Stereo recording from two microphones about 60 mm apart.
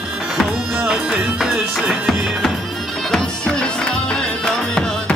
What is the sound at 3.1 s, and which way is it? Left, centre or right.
Music, centre.